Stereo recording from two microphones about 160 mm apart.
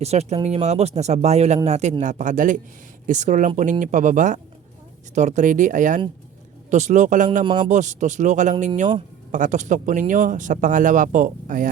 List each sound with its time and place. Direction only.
0.0 s speech: 40° right (ahead or behind)